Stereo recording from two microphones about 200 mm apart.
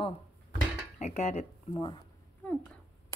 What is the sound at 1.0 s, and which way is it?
Speech, 35° left (ahead or behind).